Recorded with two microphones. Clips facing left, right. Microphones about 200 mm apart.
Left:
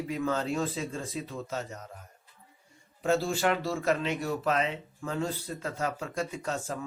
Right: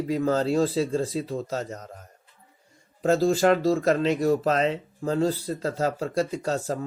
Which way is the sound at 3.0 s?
40° right (ahead or behind).